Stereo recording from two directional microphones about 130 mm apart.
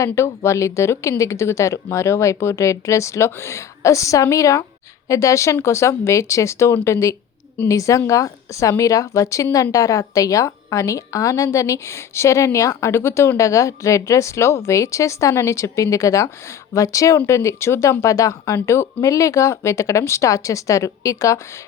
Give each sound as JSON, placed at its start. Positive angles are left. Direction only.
{"t": 0.0, "sound": "speech", "side_deg": 20}